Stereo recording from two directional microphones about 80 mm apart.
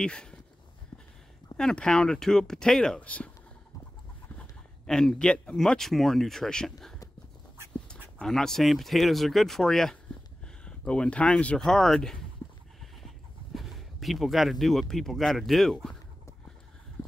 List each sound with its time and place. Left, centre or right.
0.0 s speech: centre
0.9 s a sound: left
1.6 s speech: centre
4.4 s speech: centre
7.9 s speech: centre
12.8 s a sound: centre